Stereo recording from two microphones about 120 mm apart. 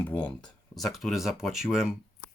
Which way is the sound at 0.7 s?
Centre (ahead or behind).